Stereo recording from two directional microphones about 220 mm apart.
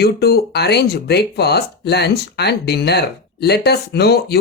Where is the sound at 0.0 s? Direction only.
45° left (ahead or behind).